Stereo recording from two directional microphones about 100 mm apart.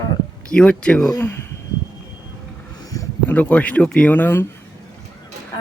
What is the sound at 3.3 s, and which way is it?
Speech, 15° left (ahead or behind).